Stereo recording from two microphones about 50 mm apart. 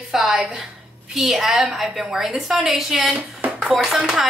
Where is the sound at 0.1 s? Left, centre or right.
Centre.